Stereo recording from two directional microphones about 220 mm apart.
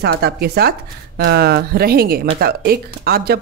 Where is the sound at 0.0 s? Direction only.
45° right (ahead or behind).